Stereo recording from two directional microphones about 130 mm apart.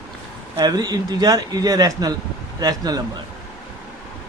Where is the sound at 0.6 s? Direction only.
30° right (ahead or behind).